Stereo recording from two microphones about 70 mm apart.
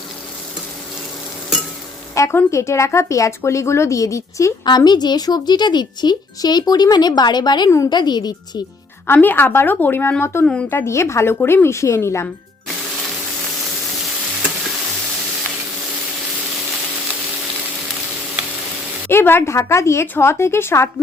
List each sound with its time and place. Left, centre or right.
2.2 s a woman's voice: left
4.6 s speech: left
9.1 s speech: left
10.4 s a woman's voice: centre
10.7 s speech: left
19.0 s speech: left